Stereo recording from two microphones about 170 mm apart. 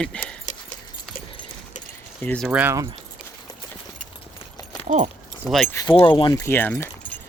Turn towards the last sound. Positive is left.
turn(degrees=10)  # may be behind; listen again after turning